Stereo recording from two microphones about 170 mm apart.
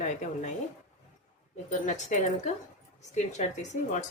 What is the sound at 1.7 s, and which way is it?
Speech, 45° left (ahead or behind).